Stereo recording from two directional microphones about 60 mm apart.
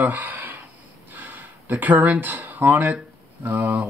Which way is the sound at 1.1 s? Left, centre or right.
Right.